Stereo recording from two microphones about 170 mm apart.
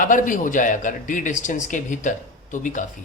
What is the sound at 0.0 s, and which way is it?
Speech, 50° left (ahead or behind).